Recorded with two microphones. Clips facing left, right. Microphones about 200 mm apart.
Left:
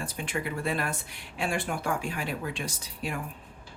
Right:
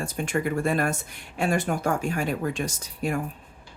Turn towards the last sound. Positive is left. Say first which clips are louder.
# right 7 dB
turn(degrees=-45)  # may be behind; listen again after turning